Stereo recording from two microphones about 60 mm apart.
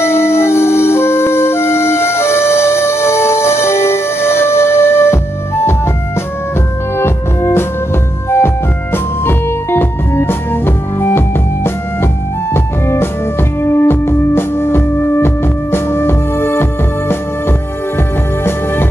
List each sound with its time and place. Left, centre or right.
0.0 s music: left
7.0 s music: left
8.9 s music: left